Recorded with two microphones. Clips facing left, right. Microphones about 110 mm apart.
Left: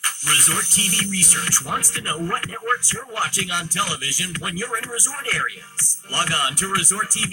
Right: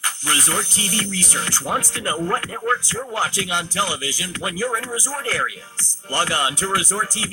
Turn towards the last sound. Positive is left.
turn(degrees=-20)  # may be behind; listen again after turning